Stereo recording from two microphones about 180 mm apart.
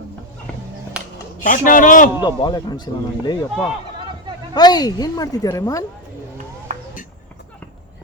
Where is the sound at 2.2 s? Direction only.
25° left (ahead or behind).